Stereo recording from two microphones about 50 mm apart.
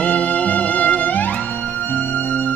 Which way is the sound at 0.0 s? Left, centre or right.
Left.